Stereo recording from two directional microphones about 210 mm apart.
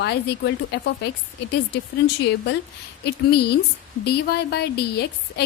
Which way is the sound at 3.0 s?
50° left (ahead or behind).